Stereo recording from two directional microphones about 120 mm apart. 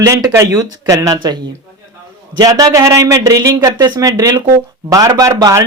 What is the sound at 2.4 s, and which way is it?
A man's voice, 30° right (ahead or behind).